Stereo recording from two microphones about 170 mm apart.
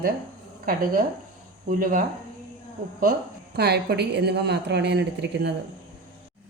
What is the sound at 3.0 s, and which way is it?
Speech, 65° right (ahead or behind).